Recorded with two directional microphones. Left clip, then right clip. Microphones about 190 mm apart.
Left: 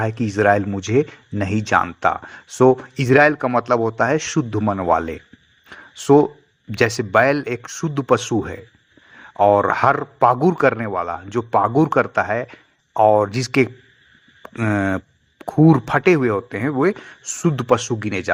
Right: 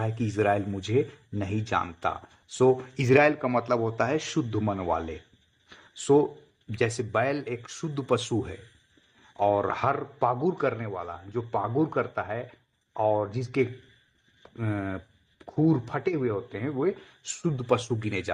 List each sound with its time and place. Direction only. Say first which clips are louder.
0.0 s speech: left 9 dB; 20° left (ahead or behind)